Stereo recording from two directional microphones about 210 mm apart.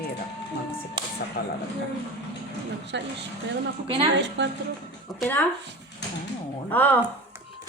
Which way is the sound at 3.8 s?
25° right (ahead or behind).